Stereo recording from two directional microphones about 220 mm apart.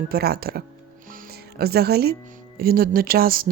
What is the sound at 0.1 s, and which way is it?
Speech, 45° right (ahead or behind).